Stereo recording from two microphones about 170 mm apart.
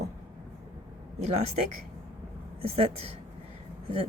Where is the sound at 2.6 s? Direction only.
35° right (ahead or behind).